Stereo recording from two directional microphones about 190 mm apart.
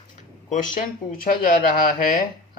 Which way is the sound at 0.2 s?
40° left (ahead or behind).